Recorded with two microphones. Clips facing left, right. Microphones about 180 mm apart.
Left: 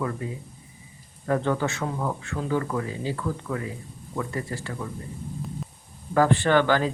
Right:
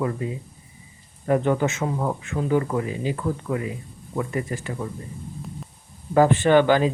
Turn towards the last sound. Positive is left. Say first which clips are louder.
# right 4 dB
turn(degrees=-15)  # may be behind; listen again after turning